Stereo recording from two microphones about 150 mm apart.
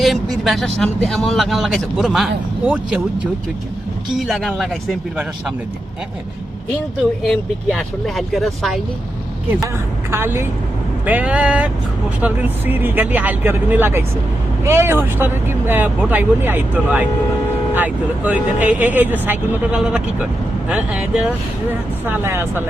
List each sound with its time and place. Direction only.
0.0 s speech: centre (ahead or behind)
4.3 s speech: centre (ahead or behind)
7.3 s speech: centre (ahead or behind)
10.1 s speech: 15° right (ahead or behind)